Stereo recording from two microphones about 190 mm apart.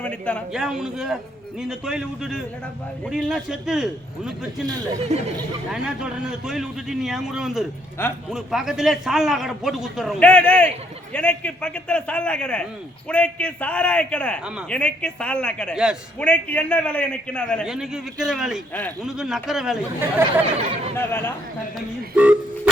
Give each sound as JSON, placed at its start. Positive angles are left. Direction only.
{"t": 0.0, "sound": "a man's voice", "side_deg": 5}
{"t": 5.1, "sound": "speech", "side_deg": -35}
{"t": 5.7, "sound": "a man's voice", "side_deg": -5}
{"t": 18.7, "sound": "a man's voice", "side_deg": 10}
{"t": 19.0, "sound": "a man's voice", "side_deg": 0}
{"t": 20.9, "sound": "a man's voice", "side_deg": 10}
{"t": 21.8, "sound": "speech", "side_deg": -5}